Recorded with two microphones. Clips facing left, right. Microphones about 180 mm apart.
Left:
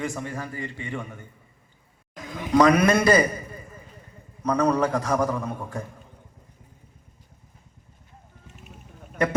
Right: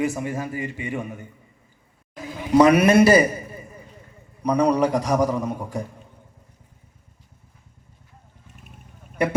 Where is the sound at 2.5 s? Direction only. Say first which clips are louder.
Right 3 dB; 10° right (ahead or behind).